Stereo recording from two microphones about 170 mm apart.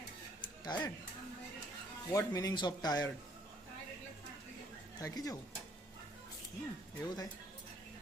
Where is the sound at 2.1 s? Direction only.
20° left (ahead or behind).